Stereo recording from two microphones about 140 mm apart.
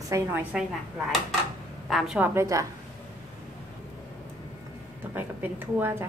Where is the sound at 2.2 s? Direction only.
20° right (ahead or behind).